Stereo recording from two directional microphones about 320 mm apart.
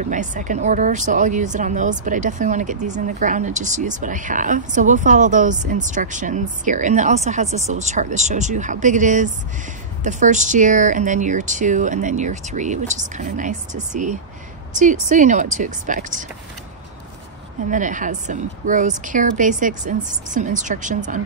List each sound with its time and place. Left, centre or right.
0.0 s speech: right
17.6 s speech: right